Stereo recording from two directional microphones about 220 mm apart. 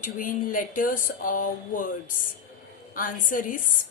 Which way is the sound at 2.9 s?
40° left (ahead or behind).